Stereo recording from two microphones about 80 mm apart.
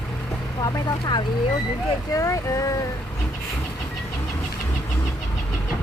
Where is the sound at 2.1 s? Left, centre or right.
Left.